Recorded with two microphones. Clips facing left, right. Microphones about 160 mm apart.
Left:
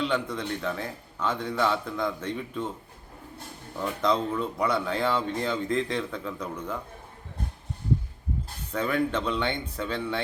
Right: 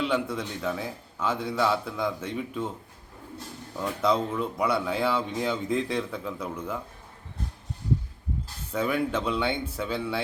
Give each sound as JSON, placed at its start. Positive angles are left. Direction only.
{"t": 0.0, "sound": "speech", "side_deg": -5}
{"t": 4.0, "sound": "speech", "side_deg": -5}
{"t": 8.7, "sound": "speech", "side_deg": -5}